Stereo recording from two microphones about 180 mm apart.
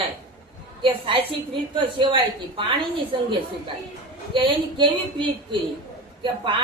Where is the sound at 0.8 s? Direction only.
30° right (ahead or behind).